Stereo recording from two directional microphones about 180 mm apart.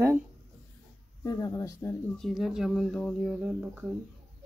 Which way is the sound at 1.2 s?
15° left (ahead or behind).